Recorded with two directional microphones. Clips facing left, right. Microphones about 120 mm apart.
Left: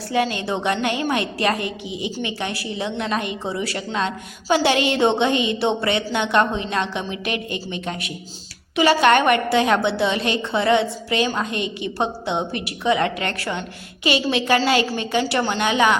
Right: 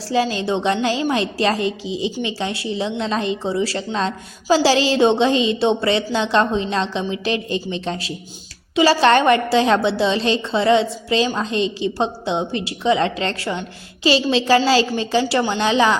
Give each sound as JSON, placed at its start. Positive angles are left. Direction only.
{"t": 0.1, "sound": "a woman's voice", "side_deg": -25}